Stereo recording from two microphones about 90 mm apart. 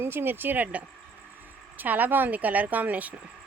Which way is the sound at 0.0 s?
25° right (ahead or behind).